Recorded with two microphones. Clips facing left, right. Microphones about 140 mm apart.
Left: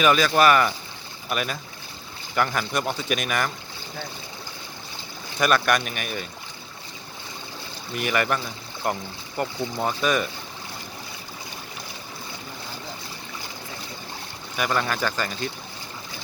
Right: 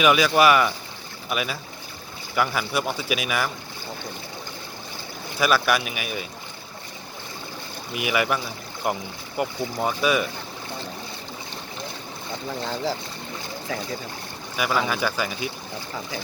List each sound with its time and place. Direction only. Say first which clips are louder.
0.0 s speech: right 1 dB; 10° right (ahead or behind)
5.4 s speech: even; 5° right (ahead or behind)
7.9 s speech: even; 5° right (ahead or behind)
12.6 s speech: right 13 dB; 90° right
14.5 s speech: right 1 dB; 5° right (ahead or behind)